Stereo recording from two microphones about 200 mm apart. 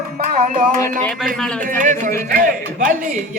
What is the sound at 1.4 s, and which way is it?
Speech, 5° left (ahead or behind).